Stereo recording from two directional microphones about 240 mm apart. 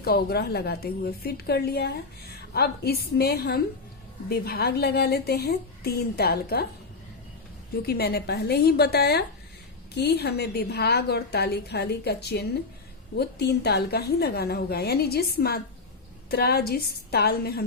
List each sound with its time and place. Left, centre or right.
0.0 s a woman's voice: left
7.8 s a woman's voice: left